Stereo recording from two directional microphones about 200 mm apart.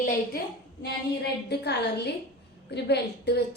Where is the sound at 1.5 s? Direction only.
55° left (ahead or behind).